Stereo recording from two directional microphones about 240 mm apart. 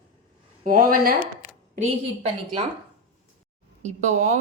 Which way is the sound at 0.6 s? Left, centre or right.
Right.